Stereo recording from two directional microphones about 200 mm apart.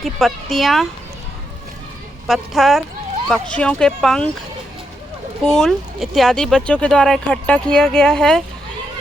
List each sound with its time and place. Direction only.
0.0 s speech: centre (ahead or behind)
2.2 s speech: centre (ahead or behind)
5.4 s speech: centre (ahead or behind)